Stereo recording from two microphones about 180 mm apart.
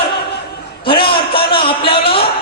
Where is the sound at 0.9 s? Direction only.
30° left (ahead or behind).